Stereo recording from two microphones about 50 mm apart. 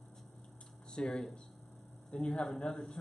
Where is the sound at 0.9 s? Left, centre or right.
Centre.